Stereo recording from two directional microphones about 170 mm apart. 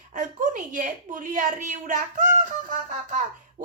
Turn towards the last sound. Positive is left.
turn(degrees=-50)  # may be behind; listen again after turning